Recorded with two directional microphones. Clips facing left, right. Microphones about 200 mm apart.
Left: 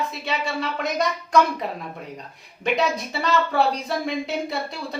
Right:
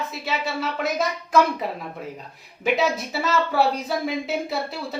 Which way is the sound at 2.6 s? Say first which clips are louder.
Right 1 dB; 5° right (ahead or behind).